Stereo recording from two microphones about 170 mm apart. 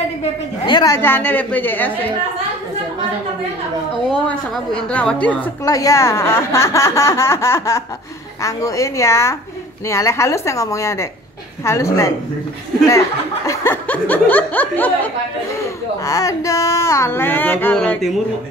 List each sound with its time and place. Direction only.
0.7 s a woman's voice: 25° left (ahead or behind)
0.9 s a woman's voice: 10° left (ahead or behind)
4.7 s a woman's voice: 5° left (ahead or behind)
13.5 s a woman's voice: 10° left (ahead or behind)